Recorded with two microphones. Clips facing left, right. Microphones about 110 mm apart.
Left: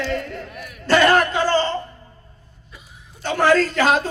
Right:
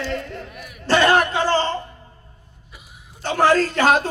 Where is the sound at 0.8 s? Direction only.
25° right (ahead or behind).